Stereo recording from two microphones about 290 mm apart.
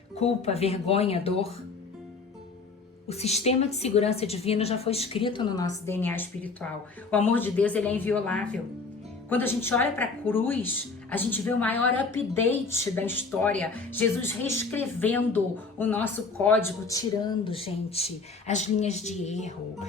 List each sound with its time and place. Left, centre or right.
0.2 s speech: left
3.1 s a woman's voice: left